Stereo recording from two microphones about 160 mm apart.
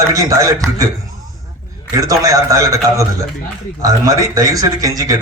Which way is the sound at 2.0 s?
20° right (ahead or behind).